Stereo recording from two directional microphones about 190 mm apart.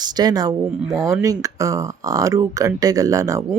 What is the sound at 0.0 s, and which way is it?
Speech, 20° right (ahead or behind).